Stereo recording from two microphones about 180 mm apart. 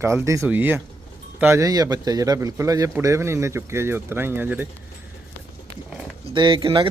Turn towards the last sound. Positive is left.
turn(degrees=-30)  # may be behind; listen again after turning